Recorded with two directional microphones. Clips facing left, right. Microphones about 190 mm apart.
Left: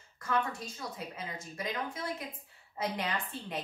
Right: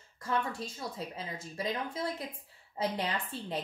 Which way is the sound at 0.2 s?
30° right (ahead or behind).